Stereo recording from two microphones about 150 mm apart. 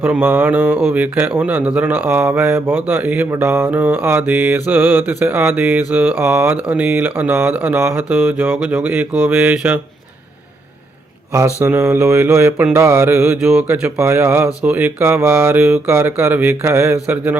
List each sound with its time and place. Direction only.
0.0 s speech: 10° right (ahead or behind)
11.3 s speech: 20° right (ahead or behind)